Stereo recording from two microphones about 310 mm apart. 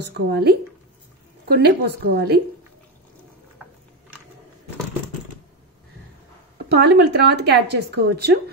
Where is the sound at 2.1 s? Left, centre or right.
Right.